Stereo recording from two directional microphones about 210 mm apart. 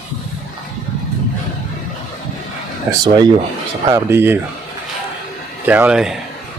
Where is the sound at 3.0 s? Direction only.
20° right (ahead or behind).